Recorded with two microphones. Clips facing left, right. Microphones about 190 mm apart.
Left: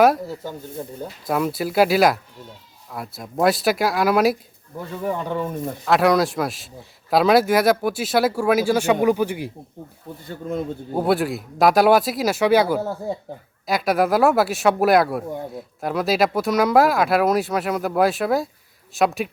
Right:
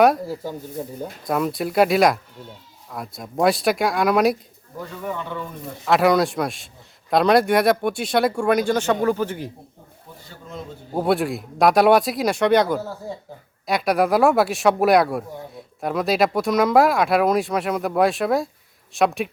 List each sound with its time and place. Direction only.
0.0 s speech: centre (ahead or behind)
5.0 s speech: 40° left (ahead or behind)
5.8 s speech: centre (ahead or behind)
10.9 s speech: centre (ahead or behind)